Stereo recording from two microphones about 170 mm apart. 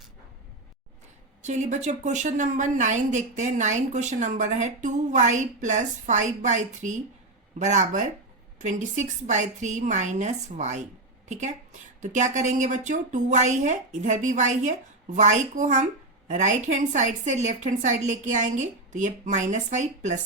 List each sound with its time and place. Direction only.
1.4 s a woman's voice: 45° right (ahead or behind)